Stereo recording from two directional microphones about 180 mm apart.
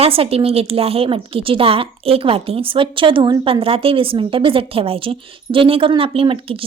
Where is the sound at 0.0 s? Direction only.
30° right (ahead or behind).